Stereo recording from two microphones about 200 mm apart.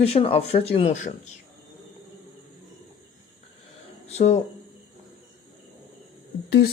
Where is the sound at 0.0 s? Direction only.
30° left (ahead or behind).